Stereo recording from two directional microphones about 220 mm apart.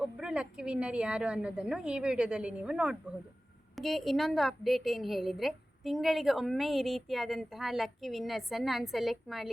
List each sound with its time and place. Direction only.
0.0 s a woman's voice: 5° right (ahead or behind)